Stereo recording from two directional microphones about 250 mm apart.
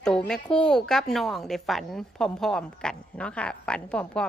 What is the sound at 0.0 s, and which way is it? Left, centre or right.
A woman's voice, centre.